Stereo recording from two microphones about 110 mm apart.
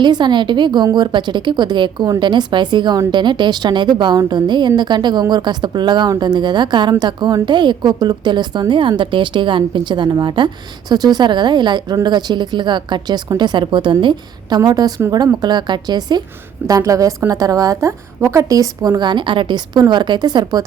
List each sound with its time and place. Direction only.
0.0 s a woman's voice: 45° right (ahead or behind)